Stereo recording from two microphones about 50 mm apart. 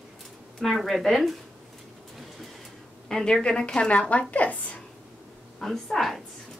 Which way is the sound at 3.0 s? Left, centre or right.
Centre.